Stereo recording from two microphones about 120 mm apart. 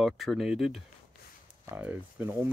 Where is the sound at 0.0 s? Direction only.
Centre (ahead or behind).